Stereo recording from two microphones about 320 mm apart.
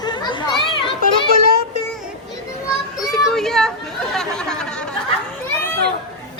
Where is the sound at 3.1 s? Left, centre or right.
Centre.